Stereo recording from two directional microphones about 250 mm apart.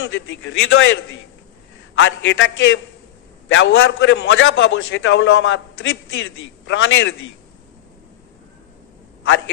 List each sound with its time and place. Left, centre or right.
0.0 s a man's voice: left
2.0 s a man's voice: left